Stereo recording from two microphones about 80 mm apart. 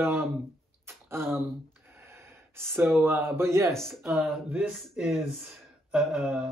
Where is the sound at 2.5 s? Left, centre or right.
Right.